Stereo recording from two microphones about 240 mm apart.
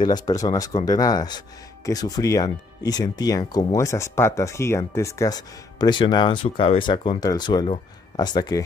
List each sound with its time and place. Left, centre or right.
0.0 s speech: centre